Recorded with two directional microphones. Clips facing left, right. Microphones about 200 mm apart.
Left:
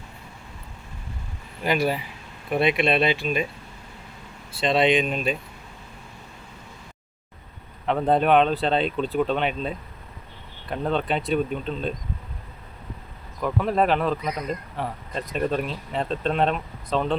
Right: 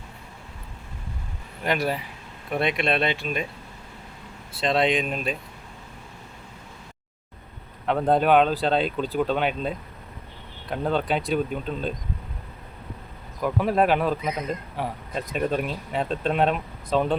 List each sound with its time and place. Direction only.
1.6 s speech: centre (ahead or behind)
4.6 s speech: centre (ahead or behind)
7.9 s speech: centre (ahead or behind)
13.4 s speech: 5° right (ahead or behind)
14.2 s speech: 25° right (ahead or behind)
14.8 s speech: 5° right (ahead or behind)